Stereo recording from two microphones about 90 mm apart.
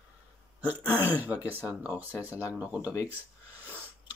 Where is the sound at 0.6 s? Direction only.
20° right (ahead or behind).